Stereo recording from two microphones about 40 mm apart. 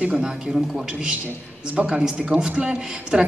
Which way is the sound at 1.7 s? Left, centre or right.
Right.